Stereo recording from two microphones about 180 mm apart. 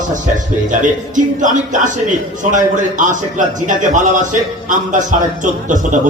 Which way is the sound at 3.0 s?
45° right (ahead or behind).